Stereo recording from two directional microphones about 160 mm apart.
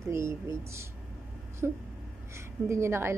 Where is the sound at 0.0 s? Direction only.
15° right (ahead or behind).